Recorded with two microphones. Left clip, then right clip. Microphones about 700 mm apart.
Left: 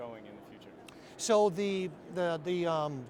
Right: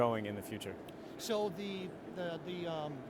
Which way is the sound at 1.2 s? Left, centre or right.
Left.